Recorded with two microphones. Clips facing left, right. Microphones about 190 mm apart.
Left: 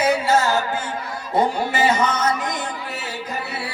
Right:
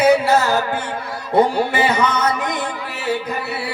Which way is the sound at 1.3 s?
60° right (ahead or behind).